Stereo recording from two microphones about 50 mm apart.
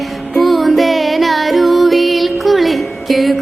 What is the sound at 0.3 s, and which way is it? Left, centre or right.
Music, centre.